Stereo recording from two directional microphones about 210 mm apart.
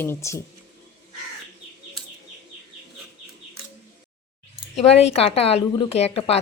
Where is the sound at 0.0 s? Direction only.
10° left (ahead or behind).